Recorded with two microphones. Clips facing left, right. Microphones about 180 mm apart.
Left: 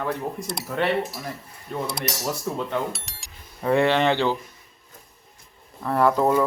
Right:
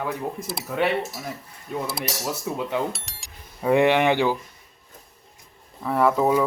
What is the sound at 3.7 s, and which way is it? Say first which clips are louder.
Speech: right 1 dB; 15° right (ahead or behind).